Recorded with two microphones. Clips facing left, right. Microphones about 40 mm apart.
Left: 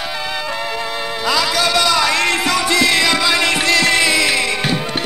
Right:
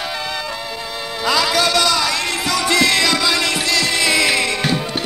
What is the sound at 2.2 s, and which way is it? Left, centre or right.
Music, left.